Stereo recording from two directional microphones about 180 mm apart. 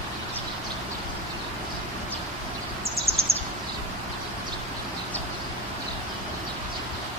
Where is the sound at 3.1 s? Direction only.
35° right (ahead or behind).